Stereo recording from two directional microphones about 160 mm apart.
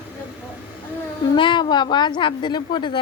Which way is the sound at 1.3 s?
30° left (ahead or behind).